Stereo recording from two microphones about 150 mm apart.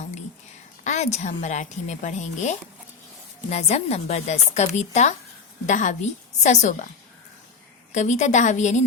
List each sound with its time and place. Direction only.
0.9 s a woman's voice: 50° left (ahead or behind)
7.9 s a woman's voice: 50° left (ahead or behind)